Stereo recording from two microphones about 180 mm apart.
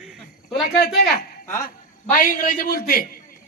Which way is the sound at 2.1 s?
50° left (ahead or behind).